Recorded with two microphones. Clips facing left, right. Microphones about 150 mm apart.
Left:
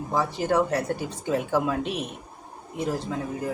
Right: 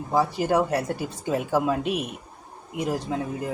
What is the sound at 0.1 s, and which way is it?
A man's voice, 10° right (ahead or behind).